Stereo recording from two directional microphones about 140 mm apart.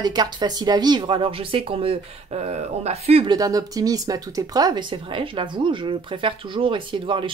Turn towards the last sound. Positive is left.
turn(degrees=-35)  # may be behind; listen again after turning